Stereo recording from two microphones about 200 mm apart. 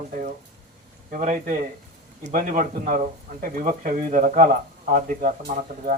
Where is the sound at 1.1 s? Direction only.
40° right (ahead or behind).